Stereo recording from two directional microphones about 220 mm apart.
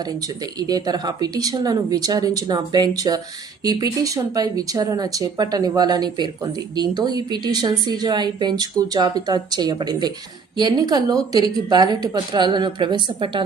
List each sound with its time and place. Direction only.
0.7 s a woman's voice: 20° right (ahead or behind)